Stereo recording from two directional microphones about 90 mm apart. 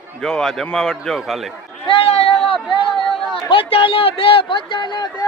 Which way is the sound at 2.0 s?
90° left.